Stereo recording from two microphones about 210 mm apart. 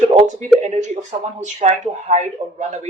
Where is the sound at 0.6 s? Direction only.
35° right (ahead or behind).